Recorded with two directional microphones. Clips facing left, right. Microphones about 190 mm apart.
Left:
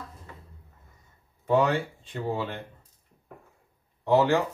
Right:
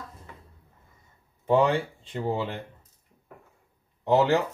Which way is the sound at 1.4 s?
25° right (ahead or behind).